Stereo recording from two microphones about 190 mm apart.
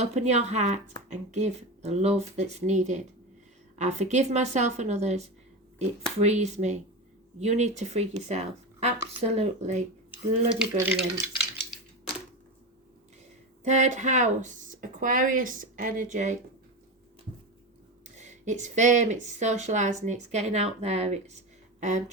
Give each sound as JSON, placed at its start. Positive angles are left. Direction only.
{"t": 0.0, "sound": "a woman's voice", "side_deg": -35}
{"t": 10.6, "sound": "speech", "side_deg": -5}
{"t": 13.7, "sound": "speech", "side_deg": -40}
{"t": 18.2, "sound": "a woman's voice", "side_deg": -40}